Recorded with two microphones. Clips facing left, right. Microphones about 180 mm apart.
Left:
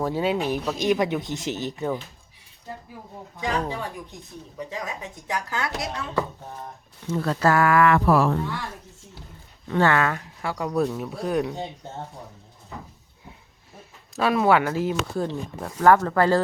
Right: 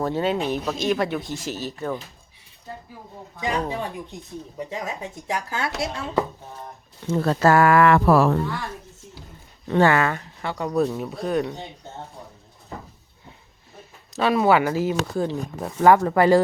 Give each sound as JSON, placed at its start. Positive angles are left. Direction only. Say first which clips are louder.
{"t": 0.0, "sound": "speech", "louder": "right 1 dB", "side_deg": 10}
{"t": 0.8, "sound": "speech", "louder": "left 3 dB", "side_deg": 15}
{"t": 3.4, "sound": "a woman's voice", "louder": "right 1 dB", "side_deg": -20}
{"t": 7.1, "sound": "a woman's voice", "louder": "right 3 dB", "side_deg": -30}
{"t": 9.8, "sound": "speech", "louder": "right 2 dB", "side_deg": -5}
{"t": 14.2, "sound": "speech", "louder": "right 1 dB", "side_deg": 0}
{"t": 15.6, "sound": "speech", "louder": "right 1 dB", "side_deg": -15}